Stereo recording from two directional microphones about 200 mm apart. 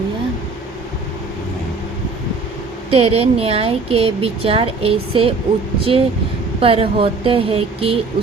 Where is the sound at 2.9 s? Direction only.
30° right (ahead or behind).